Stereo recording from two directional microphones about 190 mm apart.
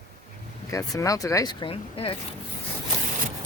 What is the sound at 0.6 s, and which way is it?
Speech, 15° left (ahead or behind).